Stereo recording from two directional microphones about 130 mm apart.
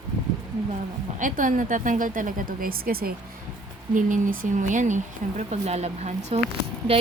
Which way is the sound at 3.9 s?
80° right.